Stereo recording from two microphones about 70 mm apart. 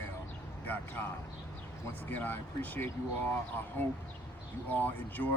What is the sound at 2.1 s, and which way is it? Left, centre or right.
Speech, left.